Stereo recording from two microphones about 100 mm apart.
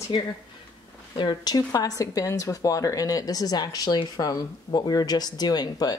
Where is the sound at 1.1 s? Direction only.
45° left (ahead or behind).